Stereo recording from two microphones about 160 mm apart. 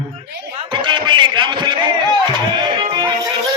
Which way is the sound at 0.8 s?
30° right (ahead or behind).